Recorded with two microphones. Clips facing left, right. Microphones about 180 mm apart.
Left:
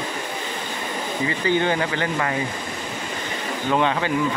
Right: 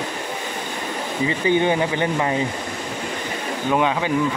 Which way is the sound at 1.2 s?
15° right (ahead or behind).